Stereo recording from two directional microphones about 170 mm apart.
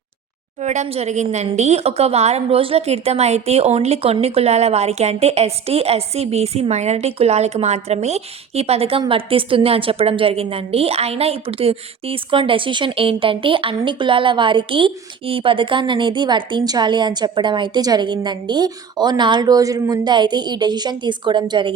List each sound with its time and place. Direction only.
0.6 s a woman's voice: 45° right (ahead or behind); by 21.7 s 25° right (ahead or behind)